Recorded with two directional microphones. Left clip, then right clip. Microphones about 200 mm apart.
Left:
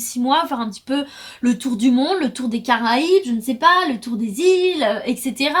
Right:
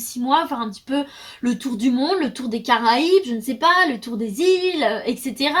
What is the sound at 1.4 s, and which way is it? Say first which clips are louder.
Speech: left 3 dB; 40° left (ahead or behind).